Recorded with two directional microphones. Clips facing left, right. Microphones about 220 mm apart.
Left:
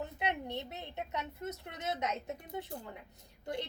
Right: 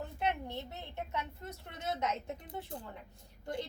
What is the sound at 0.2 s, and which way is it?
A woman's voice, 20° left (ahead or behind).